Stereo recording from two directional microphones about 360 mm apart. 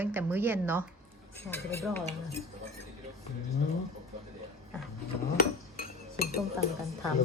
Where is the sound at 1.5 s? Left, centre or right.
Centre.